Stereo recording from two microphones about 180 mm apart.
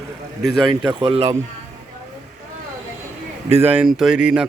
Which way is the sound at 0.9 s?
25° right (ahead or behind).